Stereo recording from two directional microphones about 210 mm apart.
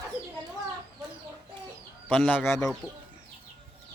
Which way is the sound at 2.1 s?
5° left (ahead or behind).